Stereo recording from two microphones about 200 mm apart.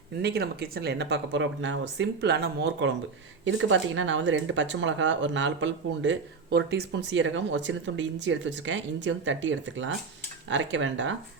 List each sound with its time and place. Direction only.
0.2 s speech: 55° right (ahead or behind)
3.4 s speech: 70° right (ahead or behind)